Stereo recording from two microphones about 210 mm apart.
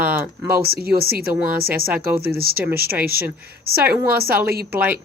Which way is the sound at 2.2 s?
45° right (ahead or behind).